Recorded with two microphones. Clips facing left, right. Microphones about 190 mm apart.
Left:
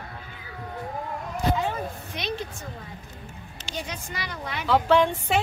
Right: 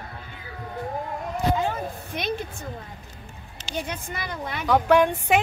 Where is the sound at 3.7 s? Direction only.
55° right (ahead or behind).